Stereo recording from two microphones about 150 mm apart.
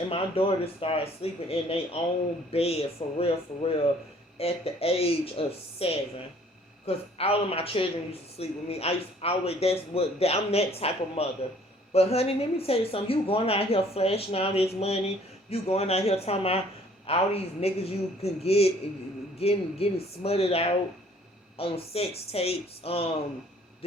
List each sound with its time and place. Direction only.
0.1 s speech: 40° left (ahead or behind)